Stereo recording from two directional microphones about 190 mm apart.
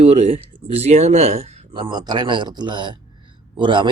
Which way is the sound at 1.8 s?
20° right (ahead or behind).